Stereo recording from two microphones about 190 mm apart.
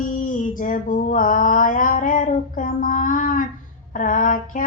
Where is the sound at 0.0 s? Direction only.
45° left (ahead or behind).